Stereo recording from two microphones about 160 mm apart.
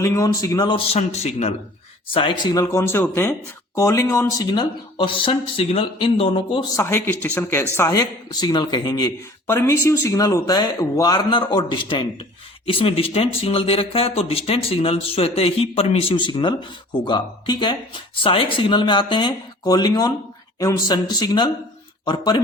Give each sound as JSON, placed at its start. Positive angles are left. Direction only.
{"t": 0.0, "sound": "speech", "side_deg": 20}
{"t": 2.1, "sound": "speech", "side_deg": 30}
{"t": 6.7, "sound": "speech", "side_deg": 15}